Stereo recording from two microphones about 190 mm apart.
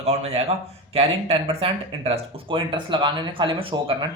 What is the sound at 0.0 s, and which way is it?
Speech, 35° right (ahead or behind).